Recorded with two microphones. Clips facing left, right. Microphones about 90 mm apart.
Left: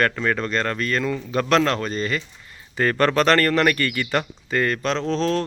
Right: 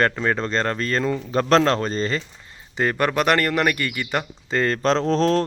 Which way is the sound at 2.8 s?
15° right (ahead or behind).